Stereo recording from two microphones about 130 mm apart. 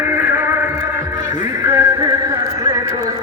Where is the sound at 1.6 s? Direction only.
20° right (ahead or behind).